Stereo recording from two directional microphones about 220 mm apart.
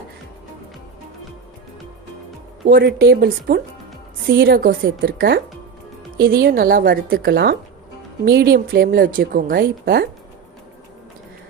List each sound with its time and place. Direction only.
2.6 s speech: 45° right (ahead or behind)